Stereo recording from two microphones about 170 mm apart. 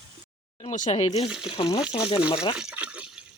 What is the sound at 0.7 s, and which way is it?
Speech, 45° left (ahead or behind).